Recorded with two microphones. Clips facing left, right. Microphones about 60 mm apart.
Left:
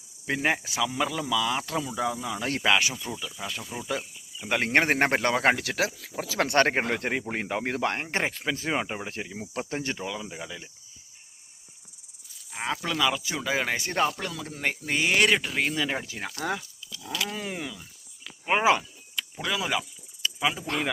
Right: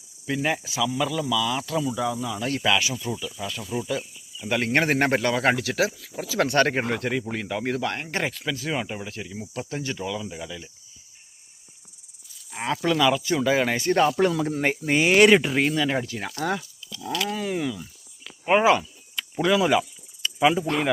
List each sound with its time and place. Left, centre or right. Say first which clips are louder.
0.3 s speech: right 2 dB; left
0.8 s speech: right 3 dB; left
3.1 s speech: right 4 dB; centre
3.8 s speech: right 2 dB; left
7.0 s speech: right 2 dB; left
10.0 s speech: right 3 dB; centre
12.5 s speech: right 6 dB; centre
14.2 s speech: right 13 dB; right
14.5 s speech: right 6 dB; centre
15.6 s speech: right 5 dB; centre
19.1 s speech: right 9 dB; centre